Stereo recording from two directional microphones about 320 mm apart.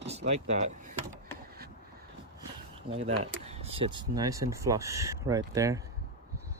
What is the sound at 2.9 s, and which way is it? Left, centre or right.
Speech, right.